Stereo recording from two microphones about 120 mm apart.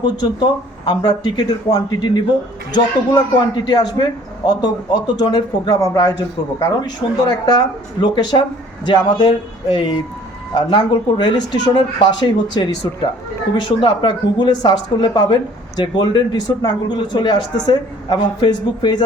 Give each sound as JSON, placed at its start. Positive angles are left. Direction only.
{"t": 0.0, "sound": "a man's voice", "side_deg": 40}